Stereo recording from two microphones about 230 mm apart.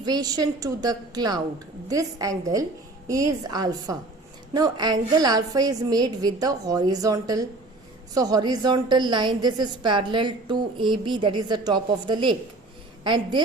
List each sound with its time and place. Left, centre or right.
0.0 s a woman's voice: centre